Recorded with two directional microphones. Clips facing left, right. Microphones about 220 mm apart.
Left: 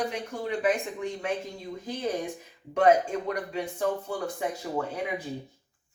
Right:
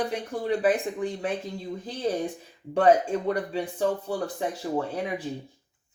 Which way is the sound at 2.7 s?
30° right (ahead or behind).